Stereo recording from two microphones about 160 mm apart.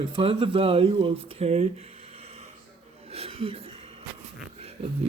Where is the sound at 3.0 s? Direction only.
40° right (ahead or behind).